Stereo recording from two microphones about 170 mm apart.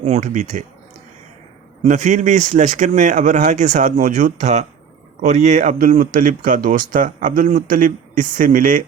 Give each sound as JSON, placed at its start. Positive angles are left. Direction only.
{"t": 0.0, "sound": "speech", "side_deg": -45}
{"t": 1.8, "sound": "speech", "side_deg": -45}